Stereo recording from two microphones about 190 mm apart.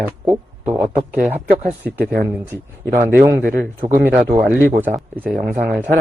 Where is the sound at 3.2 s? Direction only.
15° right (ahead or behind).